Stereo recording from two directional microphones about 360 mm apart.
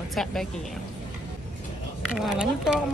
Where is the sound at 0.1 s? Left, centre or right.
Centre.